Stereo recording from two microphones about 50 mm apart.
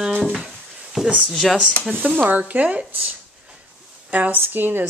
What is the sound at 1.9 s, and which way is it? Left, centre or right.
Speech, right.